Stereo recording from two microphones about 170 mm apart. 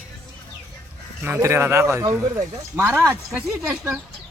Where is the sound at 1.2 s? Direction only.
15° right (ahead or behind).